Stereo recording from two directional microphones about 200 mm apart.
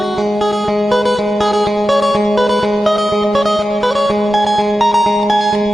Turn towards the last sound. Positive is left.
turn(degrees=0)  # may be behind; listen again after turning